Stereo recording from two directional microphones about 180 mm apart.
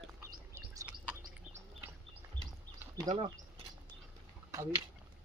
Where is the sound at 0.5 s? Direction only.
15° right (ahead or behind).